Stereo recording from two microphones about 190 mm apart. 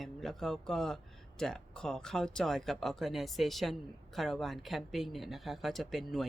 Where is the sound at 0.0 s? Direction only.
Centre (ahead or behind).